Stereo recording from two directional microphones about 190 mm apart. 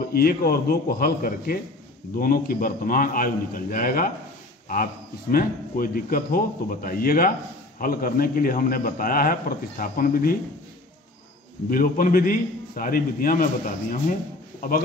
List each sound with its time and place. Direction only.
0.1 s speech: 50° left (ahead or behind)
5.3 s speech: 50° left (ahead or behind)
11.7 s speech: 50° left (ahead or behind)